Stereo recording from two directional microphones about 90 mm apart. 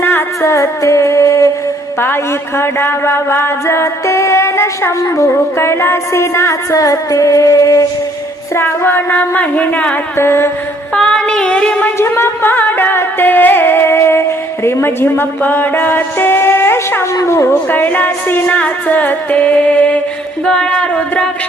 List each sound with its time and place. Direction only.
0.0 s music: 20° left (ahead or behind)
0.4 s music: 35° left (ahead or behind)
2.6 s music: 25° left (ahead or behind)
8.5 s a sound: 25° left (ahead or behind)
10.2 s a sound: 30° left (ahead or behind)
10.9 s child singing: 10° left (ahead or behind)
11.9 s music: 25° left (ahead or behind)
17.7 s music: 20° left (ahead or behind)